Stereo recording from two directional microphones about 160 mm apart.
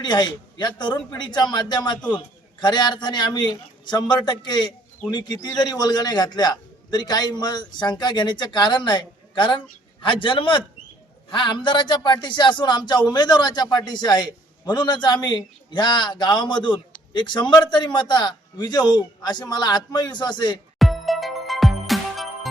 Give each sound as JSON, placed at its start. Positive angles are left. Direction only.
{"t": 0.0, "sound": "a man's voice", "side_deg": 25}
{"t": 20.7, "sound": "music", "side_deg": 0}